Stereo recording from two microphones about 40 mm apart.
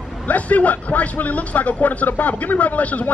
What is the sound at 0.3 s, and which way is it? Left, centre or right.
A man's voice, left.